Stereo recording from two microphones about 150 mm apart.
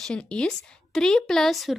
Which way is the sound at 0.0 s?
5° left (ahead or behind).